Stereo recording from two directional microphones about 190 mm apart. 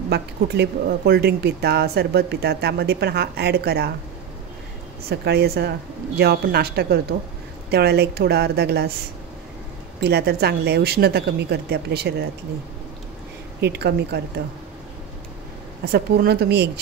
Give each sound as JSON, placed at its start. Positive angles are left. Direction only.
{"t": 0.1, "sound": "speech", "side_deg": -60}
{"t": 5.1, "sound": "speech", "side_deg": -60}
{"t": 10.0, "sound": "speech", "side_deg": -55}
{"t": 13.6, "sound": "speech", "side_deg": -60}
{"t": 15.8, "sound": "speech", "side_deg": -55}